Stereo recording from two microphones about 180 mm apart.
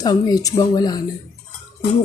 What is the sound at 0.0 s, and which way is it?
Speech, 20° left (ahead or behind).